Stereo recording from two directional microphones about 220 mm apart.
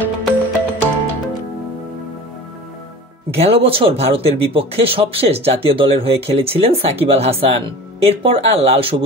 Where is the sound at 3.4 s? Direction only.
25° right (ahead or behind).